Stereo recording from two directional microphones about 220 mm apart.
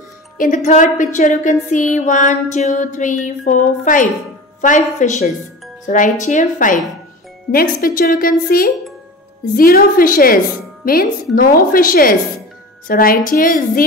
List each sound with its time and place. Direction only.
0.7 s music: 35° left (ahead or behind)